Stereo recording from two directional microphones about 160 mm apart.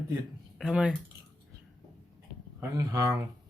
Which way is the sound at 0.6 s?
5° right (ahead or behind).